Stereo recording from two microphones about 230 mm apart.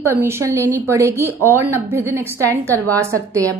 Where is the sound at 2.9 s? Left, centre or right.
Centre.